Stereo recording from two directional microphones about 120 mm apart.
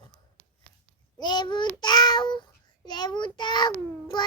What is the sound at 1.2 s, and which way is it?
Child singing, 40° left (ahead or behind).